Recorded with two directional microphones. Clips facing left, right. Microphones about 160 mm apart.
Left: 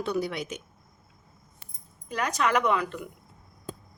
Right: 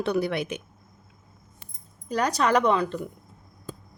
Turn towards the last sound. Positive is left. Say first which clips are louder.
# right 3 dB
turn(degrees=-30)  # may be behind; listen again after turning